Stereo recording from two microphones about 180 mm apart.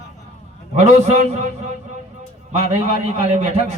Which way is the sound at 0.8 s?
40° right (ahead or behind).